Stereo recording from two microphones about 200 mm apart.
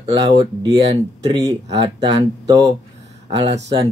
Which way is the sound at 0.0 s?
20° right (ahead or behind).